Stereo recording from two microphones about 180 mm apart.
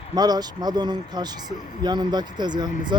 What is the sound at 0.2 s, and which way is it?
Speech, 20° right (ahead or behind).